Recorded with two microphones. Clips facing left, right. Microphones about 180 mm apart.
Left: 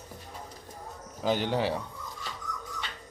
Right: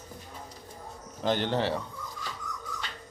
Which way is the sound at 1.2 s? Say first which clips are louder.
Even; 5° left (ahead or behind).